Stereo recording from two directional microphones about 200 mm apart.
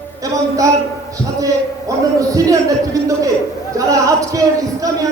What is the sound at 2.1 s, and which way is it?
A man's voice, 15° right (ahead or behind).